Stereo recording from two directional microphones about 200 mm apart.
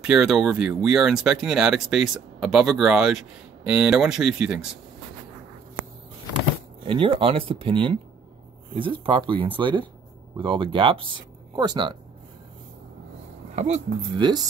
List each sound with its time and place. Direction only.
0.0 s speech: 5° right (ahead or behind)
6.8 s speech: 25° right (ahead or behind)
13.6 s speech: 35° right (ahead or behind)